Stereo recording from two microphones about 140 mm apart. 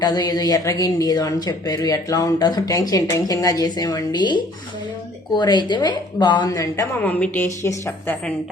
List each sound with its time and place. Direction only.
0.0 s a woman's voice: 30° left (ahead or behind)
7.0 s a woman's voice: 10° left (ahead or behind)